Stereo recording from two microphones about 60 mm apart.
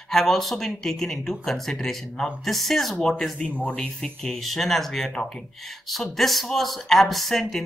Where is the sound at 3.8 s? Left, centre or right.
Centre.